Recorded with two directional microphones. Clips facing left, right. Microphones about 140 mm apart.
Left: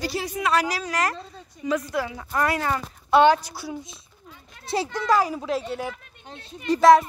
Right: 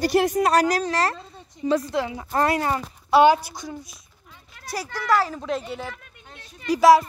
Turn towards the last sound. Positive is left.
turn(degrees=-5)  # may be behind; listen again after turning